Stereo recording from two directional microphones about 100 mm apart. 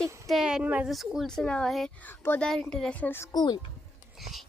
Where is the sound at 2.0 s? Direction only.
20° left (ahead or behind).